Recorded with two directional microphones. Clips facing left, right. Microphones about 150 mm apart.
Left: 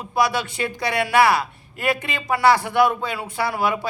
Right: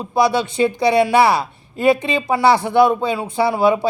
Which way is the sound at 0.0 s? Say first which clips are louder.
Right 5 dB; 25° right (ahead or behind).